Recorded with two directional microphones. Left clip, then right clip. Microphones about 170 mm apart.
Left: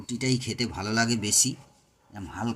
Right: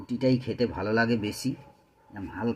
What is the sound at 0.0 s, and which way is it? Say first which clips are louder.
Speech: right 3 dB; 90° left.